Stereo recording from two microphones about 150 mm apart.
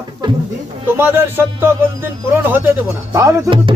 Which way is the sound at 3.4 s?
35° right (ahead or behind).